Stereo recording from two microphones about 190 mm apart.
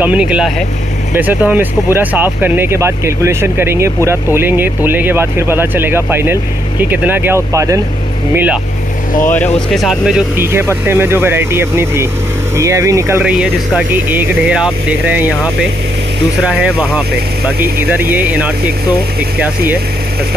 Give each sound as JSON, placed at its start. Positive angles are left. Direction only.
{"t": 0.0, "sound": "speech", "side_deg": -5}
{"t": 9.7, "sound": "speech", "side_deg": 0}
{"t": 13.2, "sound": "speech", "side_deg": -5}
{"t": 16.4, "sound": "speech", "side_deg": -5}